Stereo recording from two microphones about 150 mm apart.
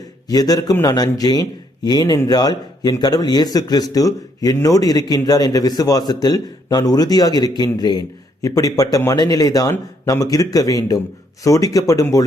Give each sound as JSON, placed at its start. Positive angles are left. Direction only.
{"t": 0.3, "sound": "a man's voice", "side_deg": 25}